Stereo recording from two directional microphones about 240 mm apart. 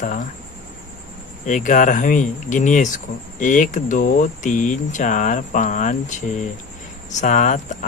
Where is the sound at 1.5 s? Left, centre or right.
Left.